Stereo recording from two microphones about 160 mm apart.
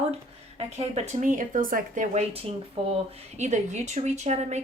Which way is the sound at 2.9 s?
45° right (ahead or behind).